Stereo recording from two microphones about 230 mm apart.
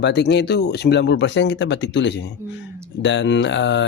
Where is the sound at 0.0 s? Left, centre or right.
Left.